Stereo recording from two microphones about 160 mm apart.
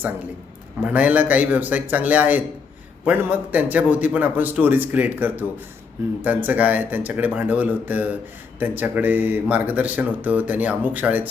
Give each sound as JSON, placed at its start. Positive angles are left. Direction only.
{"t": 0.8, "sound": "speech", "side_deg": -10}